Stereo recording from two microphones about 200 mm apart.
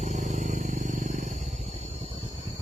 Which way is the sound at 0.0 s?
35° right (ahead or behind).